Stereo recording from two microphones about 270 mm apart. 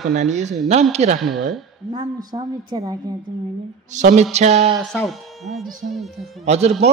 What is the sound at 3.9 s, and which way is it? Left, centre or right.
Speech, right.